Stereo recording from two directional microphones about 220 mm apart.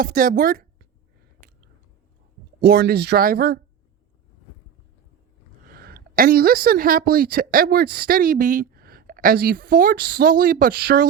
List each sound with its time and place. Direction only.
0.0 s speech: 40° right (ahead or behind)
2.6 s speech: 50° right (ahead or behind)
5.6 s a woman's voice: 40° right (ahead or behind)